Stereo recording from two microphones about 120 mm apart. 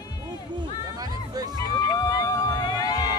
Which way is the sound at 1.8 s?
30° left (ahead or behind).